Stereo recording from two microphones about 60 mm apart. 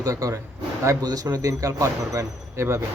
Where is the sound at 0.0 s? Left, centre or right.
Right.